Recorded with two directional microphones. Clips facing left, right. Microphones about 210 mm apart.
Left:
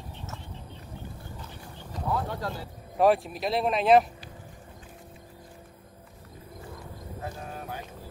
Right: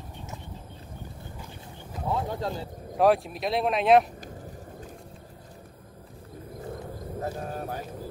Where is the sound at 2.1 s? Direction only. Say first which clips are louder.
Right 2 dB; 25° right (ahead or behind).